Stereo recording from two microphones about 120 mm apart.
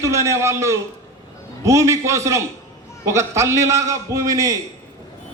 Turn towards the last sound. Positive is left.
turn(degrees=-25)  # may be behind; listen again after turning